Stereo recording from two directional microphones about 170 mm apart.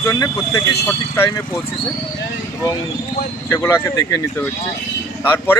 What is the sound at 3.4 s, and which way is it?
Speech, 15° left (ahead or behind).